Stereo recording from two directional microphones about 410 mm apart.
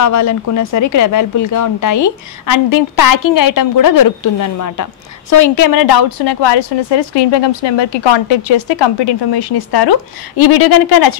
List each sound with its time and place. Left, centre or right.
0.0 s speech: left